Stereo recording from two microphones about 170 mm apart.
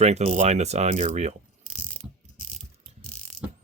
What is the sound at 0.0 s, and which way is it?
Speech, 40° right (ahead or behind).